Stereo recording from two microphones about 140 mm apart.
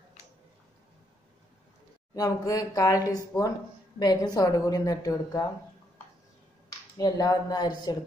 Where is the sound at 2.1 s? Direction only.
25° left (ahead or behind).